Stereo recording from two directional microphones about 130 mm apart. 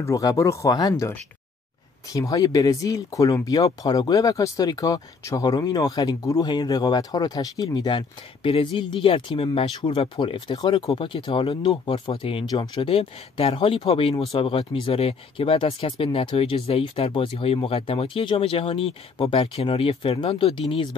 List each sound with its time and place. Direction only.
0.0 s speech: 25° left (ahead or behind)
2.1 s speech: 30° left (ahead or behind); by 12.4 s 45° left (ahead or behind)
12.4 s speech: 35° left (ahead or behind)
12.9 s speech: 45° left (ahead or behind)